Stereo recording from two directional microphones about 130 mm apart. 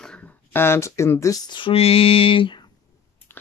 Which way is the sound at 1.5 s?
40° left (ahead or behind).